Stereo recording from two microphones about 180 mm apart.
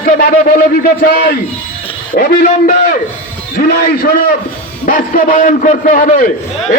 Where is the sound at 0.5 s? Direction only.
55° left (ahead or behind).